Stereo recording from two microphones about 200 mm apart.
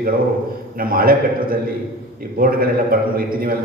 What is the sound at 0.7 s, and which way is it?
A man's voice, 45° right (ahead or behind).